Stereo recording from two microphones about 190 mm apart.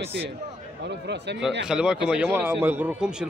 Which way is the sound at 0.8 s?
65° right (ahead or behind).